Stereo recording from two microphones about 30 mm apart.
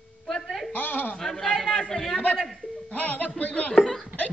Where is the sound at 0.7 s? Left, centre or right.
Left.